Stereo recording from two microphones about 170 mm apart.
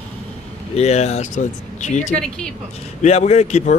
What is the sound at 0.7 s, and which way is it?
Speech, 40° left (ahead or behind).